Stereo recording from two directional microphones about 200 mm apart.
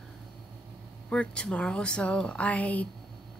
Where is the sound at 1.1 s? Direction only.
5° left (ahead or behind).